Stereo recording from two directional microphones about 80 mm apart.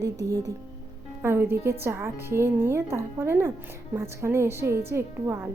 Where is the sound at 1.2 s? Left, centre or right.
Right.